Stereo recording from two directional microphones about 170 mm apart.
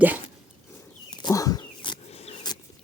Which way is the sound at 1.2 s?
20° left (ahead or behind).